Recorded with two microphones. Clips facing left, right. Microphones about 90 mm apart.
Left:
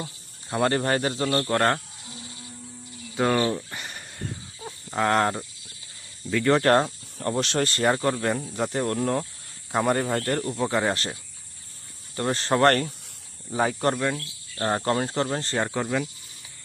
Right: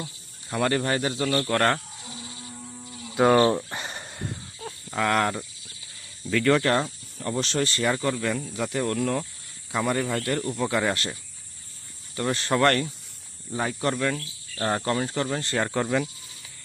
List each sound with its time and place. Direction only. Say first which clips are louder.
0.5 s speech: left 1 dB; 35° left (ahead or behind)
1.5 s cricket: even; 20° left (ahead or behind)
3.3 s a sound: right 5 dB; 30° right (ahead or behind)
4.9 s cricket: left 1 dB; 30° left (ahead or behind)
6.3 s speech: right 1 dB; 5° right (ahead or behind)
6.6 s speech: left 4 dB; 45° left (ahead or behind); by 9.2 s 30° left (ahead or behind)
9.7 s speech: left 2 dB; 45° left (ahead or behind)
10.6 s cricket: left 1 dB; 25° left (ahead or behind)
12.1 s speech: left 1 dB; 35° left (ahead or behind)
14.6 s cricket: left 1 dB; 20° left (ahead or behind)
14.8 s speech: left 1 dB; 35° left (ahead or behind)
15.7 s speech: right 2 dB; centre (ahead or behind)